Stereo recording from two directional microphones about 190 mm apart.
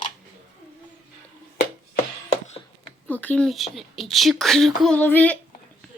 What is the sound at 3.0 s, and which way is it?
Speech, 10° left (ahead or behind).